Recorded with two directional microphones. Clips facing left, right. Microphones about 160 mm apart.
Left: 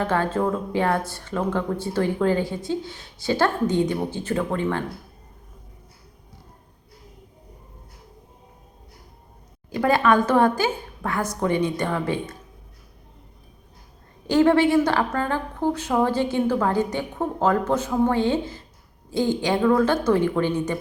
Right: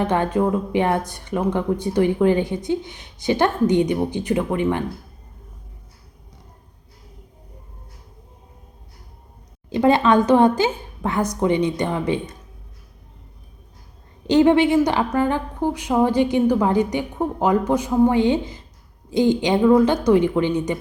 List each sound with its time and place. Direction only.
0.0 s speech: 20° right (ahead or behind)
9.6 s a woman's voice: 20° right (ahead or behind)
14.3 s speech: 20° right (ahead or behind)